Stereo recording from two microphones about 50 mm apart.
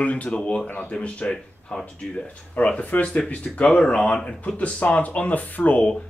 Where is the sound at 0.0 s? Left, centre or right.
Left.